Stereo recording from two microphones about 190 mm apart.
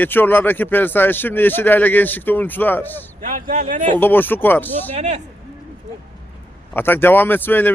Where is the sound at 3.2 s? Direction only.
45° right (ahead or behind).